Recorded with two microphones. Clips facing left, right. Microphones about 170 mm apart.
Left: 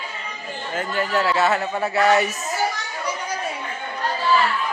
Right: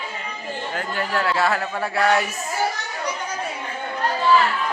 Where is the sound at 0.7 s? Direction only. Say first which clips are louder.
Left 3 dB; centre (ahead or behind).